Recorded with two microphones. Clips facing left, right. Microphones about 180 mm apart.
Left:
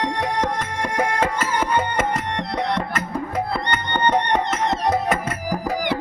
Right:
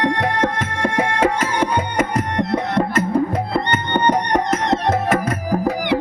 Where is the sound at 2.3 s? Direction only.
50° right (ahead or behind).